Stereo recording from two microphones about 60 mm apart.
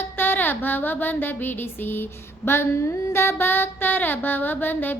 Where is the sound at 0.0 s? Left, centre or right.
Left.